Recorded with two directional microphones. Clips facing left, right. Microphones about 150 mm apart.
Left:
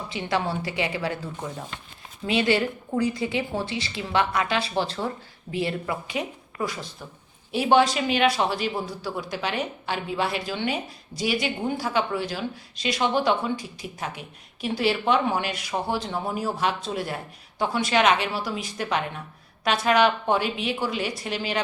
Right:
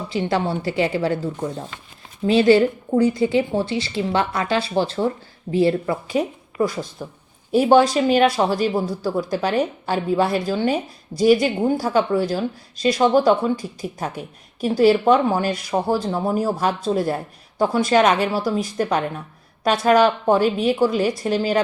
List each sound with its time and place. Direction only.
0.1 s speech: 35° right (ahead or behind)
7.0 s speech: 20° right (ahead or behind)
7.5 s a woman's voice: 45° right (ahead or behind)